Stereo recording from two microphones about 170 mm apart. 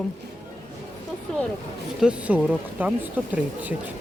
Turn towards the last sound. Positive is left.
turn(degrees=-10)  # may be behind; listen again after turning